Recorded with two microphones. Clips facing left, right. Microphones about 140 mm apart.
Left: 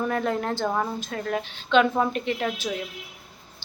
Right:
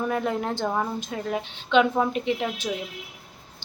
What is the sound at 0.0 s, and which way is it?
A woman's voice, 10° right (ahead or behind).